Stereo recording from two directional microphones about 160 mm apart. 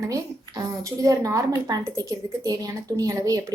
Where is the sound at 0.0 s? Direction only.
20° right (ahead or behind).